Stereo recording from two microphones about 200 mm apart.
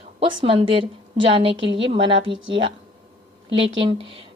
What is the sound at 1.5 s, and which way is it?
Speech, 65° right (ahead or behind).